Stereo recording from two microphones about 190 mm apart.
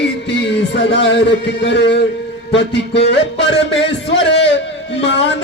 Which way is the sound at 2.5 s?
65° left (ahead or behind).